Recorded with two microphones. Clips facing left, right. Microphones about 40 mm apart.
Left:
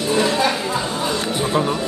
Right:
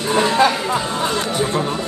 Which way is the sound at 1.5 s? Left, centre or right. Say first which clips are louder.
Left 2 dB; centre.